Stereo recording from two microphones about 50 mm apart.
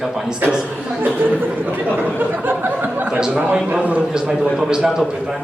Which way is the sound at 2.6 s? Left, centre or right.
Right.